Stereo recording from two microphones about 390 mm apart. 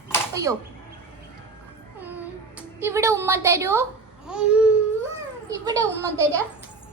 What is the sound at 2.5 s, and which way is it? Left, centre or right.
A woman's voice, centre.